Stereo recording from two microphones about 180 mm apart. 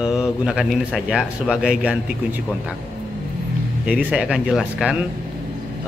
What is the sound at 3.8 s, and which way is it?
A man's voice, 5° right (ahead or behind).